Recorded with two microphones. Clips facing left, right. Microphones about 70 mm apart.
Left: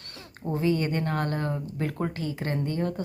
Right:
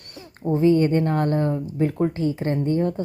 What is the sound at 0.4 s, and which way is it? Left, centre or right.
Speech, right.